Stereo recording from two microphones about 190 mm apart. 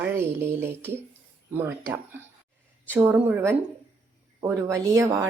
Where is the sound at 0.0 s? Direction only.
10° right (ahead or behind).